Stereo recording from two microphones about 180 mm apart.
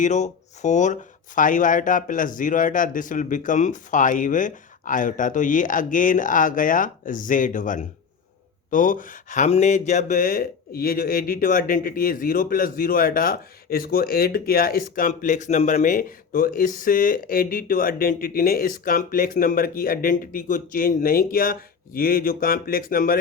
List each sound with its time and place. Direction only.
0.0 s speech: 40° left (ahead or behind)